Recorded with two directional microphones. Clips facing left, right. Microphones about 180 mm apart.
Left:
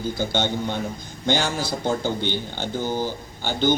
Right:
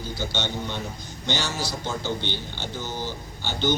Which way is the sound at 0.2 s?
50° left (ahead or behind).